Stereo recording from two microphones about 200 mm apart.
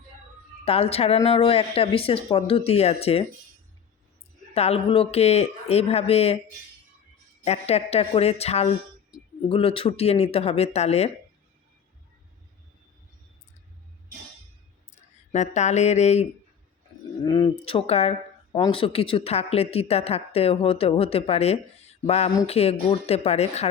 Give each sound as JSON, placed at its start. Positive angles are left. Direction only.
{"t": 0.6, "sound": "a woman's voice", "side_deg": 30}
{"t": 4.5, "sound": "speech", "side_deg": 30}
{"t": 7.4, "sound": "speech", "side_deg": 30}
{"t": 14.9, "sound": "speech", "side_deg": 35}
{"t": 17.2, "sound": "a woman's voice", "side_deg": 20}
{"t": 22.0, "sound": "a sound", "side_deg": 30}
{"t": 22.4, "sound": "speech", "side_deg": 30}